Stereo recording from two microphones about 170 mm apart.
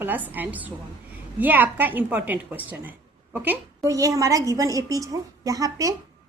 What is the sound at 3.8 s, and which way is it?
A woman's voice, 20° right (ahead or behind).